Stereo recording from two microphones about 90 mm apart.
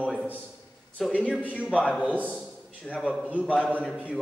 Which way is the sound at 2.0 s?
15° right (ahead or behind).